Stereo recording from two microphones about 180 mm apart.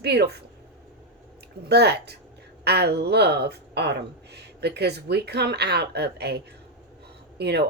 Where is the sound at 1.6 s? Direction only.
65° right (ahead or behind).